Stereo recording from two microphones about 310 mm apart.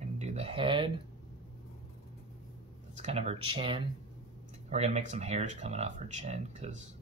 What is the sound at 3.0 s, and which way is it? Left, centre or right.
Speech, right.